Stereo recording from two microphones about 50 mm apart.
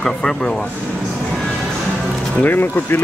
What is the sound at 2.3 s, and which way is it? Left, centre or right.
Speech, left.